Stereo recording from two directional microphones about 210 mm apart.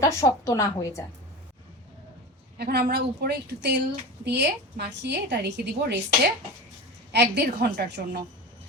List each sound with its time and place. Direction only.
0.0 s a woman's voice: 15° left (ahead or behind)
2.6 s a woman's voice: 50° right (ahead or behind)
7.1 s a woman's voice: 50° right (ahead or behind)